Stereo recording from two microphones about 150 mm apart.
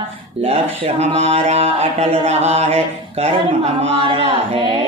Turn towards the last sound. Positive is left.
turn(degrees=-40)  # may be behind; listen again after turning